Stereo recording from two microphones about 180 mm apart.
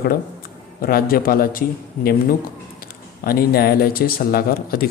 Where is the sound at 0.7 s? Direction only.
55° left (ahead or behind).